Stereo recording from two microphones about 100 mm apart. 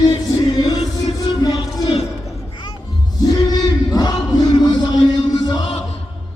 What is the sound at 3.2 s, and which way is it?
Music, 40° left (ahead or behind).